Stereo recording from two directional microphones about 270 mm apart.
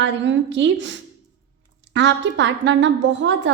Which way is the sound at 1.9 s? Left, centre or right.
Right.